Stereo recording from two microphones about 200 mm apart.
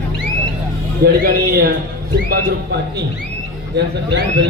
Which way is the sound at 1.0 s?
50° right (ahead or behind).